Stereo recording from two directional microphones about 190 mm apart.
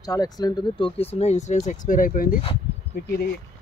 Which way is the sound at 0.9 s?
35° left (ahead or behind).